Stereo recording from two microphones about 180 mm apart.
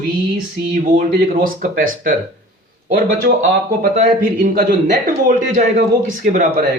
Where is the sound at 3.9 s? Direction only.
45° right (ahead or behind).